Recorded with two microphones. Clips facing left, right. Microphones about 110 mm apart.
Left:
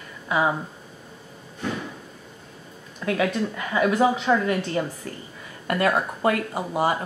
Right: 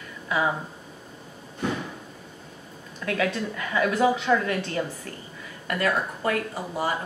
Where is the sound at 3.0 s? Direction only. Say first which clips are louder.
Left 3 dB; 25° left (ahead or behind).